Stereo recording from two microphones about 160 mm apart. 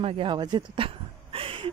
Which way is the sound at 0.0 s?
35° right (ahead or behind).